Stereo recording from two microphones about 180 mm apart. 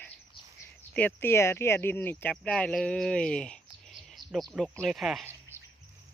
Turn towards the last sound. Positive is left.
turn(degrees=-10)  # may be behind; listen again after turning